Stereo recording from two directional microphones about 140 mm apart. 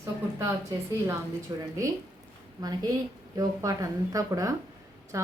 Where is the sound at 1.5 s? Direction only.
30° right (ahead or behind).